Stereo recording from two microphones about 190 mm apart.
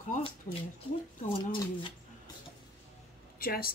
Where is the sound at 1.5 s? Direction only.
25° left (ahead or behind).